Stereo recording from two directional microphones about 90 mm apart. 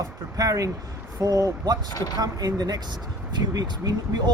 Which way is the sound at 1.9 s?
45° left (ahead or behind).